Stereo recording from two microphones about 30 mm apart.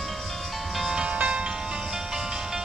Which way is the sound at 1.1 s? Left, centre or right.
Right.